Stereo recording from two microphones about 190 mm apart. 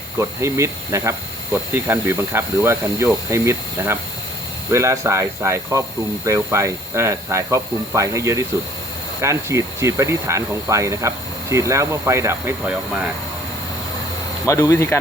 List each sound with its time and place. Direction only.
0.2 s speech: 15° right (ahead or behind)
14.4 s speech: 15° left (ahead or behind)